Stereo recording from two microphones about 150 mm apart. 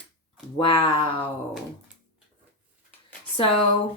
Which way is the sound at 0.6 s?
35° left (ahead or behind).